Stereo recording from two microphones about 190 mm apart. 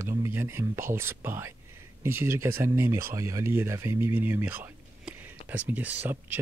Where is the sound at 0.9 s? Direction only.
10° right (ahead or behind).